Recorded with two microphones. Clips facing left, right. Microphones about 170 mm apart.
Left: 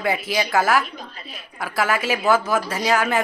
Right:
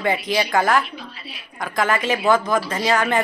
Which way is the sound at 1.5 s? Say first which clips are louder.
Right 1 dB; 5° left (ahead or behind).